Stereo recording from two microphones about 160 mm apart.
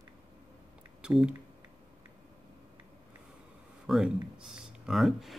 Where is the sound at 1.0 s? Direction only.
5° right (ahead or behind).